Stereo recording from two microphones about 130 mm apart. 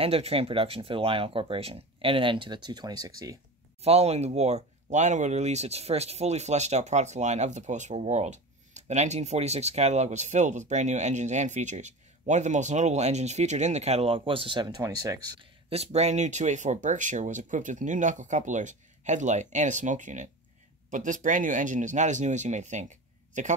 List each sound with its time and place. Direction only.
0.0 s speech: 50° right (ahead or behind); by 3.3 s 30° right (ahead or behind)
3.8 s speech: 55° right (ahead or behind); by 15.4 s 30° right (ahead or behind)
15.7 s speech: 55° right (ahead or behind)